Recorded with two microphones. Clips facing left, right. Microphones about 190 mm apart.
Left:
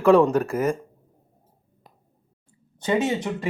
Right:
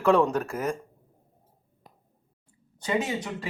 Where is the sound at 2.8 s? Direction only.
25° left (ahead or behind).